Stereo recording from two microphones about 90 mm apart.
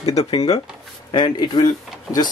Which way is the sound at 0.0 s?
45° left (ahead or behind).